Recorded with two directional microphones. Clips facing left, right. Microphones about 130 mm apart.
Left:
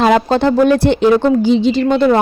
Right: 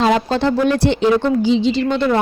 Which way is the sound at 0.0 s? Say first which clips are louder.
Left 4 dB; 55° left (ahead or behind).